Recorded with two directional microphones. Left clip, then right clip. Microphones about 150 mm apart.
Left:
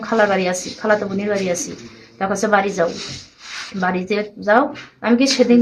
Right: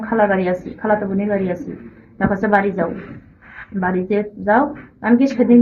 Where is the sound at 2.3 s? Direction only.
35° left (ahead or behind).